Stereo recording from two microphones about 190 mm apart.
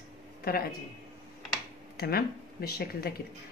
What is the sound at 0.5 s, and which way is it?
Speech, 55° left (ahead or behind).